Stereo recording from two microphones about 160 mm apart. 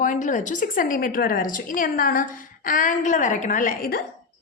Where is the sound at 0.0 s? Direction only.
55° left (ahead or behind).